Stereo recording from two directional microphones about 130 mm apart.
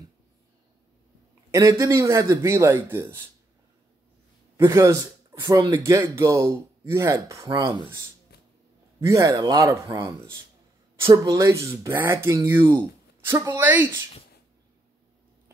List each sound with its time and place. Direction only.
1.5 s speech: 25° right (ahead or behind)
4.6 s speech: 20° right (ahead or behind)
7.6 s speech: 35° right (ahead or behind)
9.0 s speech: 25° right (ahead or behind)
11.0 s speech: 20° right (ahead or behind)